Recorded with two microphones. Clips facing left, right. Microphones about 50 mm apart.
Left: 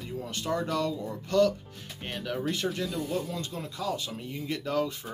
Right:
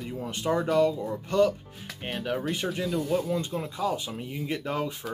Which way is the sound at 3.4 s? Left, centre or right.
Centre.